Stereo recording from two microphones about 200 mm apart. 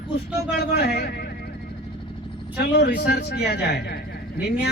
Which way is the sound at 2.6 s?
50° left (ahead or behind).